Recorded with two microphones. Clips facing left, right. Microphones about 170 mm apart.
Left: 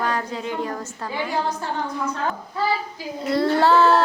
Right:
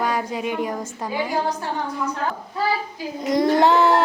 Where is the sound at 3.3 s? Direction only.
15° right (ahead or behind).